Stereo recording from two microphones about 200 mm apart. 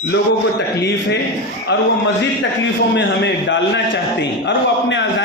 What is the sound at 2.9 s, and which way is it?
A man's voice, 60° left (ahead or behind).